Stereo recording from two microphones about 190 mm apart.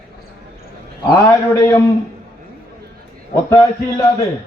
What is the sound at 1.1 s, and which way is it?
Speech, 20° left (ahead or behind).